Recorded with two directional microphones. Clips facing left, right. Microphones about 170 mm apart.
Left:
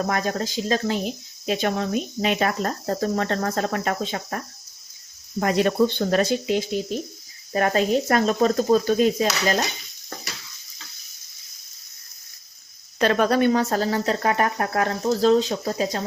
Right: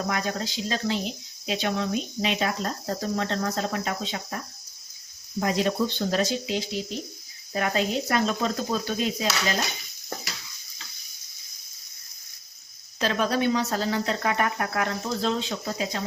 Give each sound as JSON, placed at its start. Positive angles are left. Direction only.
{"t": 0.1, "sound": "speech", "side_deg": 45}
{"t": 5.4, "sound": "speech", "side_deg": 60}
{"t": 13.0, "sound": "speech", "side_deg": 60}